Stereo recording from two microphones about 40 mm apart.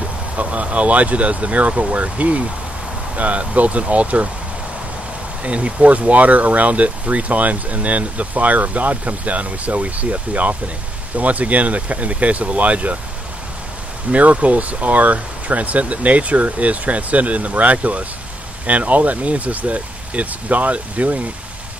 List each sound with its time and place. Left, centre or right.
0.4 s speech: right
5.4 s speech: right
14.1 s speech: right